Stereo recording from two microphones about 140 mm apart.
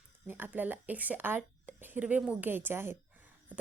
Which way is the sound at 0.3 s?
15° right (ahead or behind).